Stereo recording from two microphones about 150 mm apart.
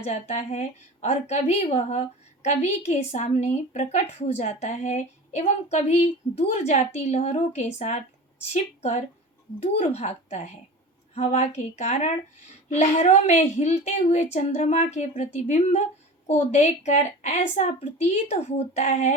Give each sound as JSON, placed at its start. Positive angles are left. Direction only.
{"t": 0.0, "sound": "a woman's voice", "side_deg": 45}